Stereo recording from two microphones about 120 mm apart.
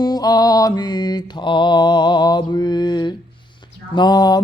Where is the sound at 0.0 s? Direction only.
35° left (ahead or behind).